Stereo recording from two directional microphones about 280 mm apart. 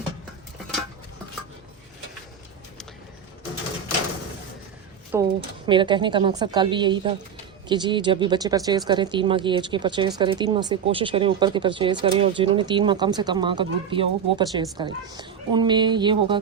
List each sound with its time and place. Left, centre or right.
5.1 s speech: centre